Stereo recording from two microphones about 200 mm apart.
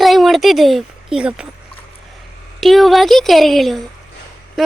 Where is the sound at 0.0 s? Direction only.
Centre (ahead or behind).